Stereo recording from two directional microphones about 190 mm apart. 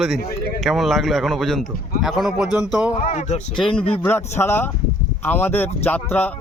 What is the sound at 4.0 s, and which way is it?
Speech, 10° left (ahead or behind).